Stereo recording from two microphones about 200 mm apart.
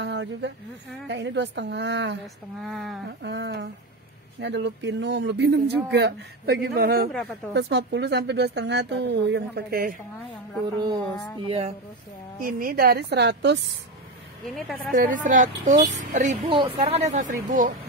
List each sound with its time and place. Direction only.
0.0 s a sound: 65° right (ahead or behind)
1.0 s a woman's voice: 60° right (ahead or behind)
2.6 s speech: centre (ahead or behind)
3.1 s a woman's voice: 60° right (ahead or behind)
11.4 s speech: 30° right (ahead or behind)
12.4 s a woman's voice: 45° right (ahead or behind)
14.9 s a woman's voice: 40° right (ahead or behind)
16.4 s a woman's voice: 25° right (ahead or behind); by 17.7 s 40° right (ahead or behind)